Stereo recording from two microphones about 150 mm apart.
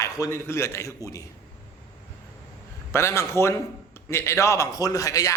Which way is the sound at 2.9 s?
20° left (ahead or behind).